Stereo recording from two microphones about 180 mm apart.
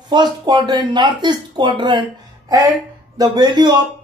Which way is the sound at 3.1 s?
25° right (ahead or behind).